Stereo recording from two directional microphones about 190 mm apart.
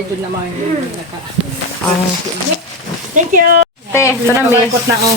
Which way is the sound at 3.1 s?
45° right (ahead or behind).